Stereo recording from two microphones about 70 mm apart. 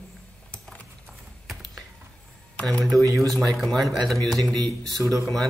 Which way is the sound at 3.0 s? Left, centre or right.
Right.